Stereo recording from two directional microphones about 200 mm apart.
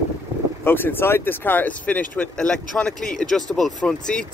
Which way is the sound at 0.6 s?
10° left (ahead or behind).